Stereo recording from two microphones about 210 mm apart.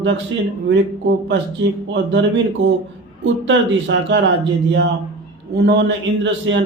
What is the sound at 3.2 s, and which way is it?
A man's voice, 60° right (ahead or behind).